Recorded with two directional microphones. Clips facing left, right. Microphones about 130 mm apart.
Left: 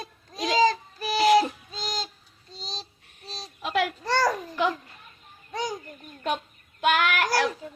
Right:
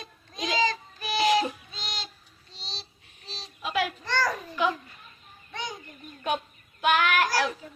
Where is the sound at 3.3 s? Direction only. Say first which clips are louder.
Left 3 dB; 40° left (ahead or behind).